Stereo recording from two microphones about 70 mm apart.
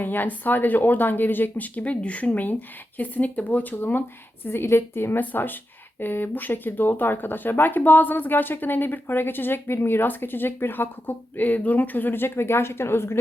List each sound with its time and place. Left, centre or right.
0.0 s speech: left